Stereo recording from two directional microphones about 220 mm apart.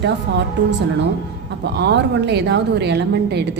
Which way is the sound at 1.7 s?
50° right (ahead or behind).